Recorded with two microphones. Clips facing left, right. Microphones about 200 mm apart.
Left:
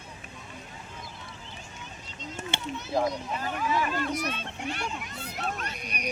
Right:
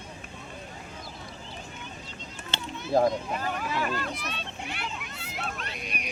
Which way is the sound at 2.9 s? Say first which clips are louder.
Right 5 dB; 50° right (ahead or behind).